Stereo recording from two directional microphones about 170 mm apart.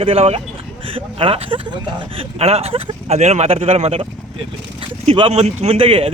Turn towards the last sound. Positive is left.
turn(degrees=-30)  # may be behind; listen again after turning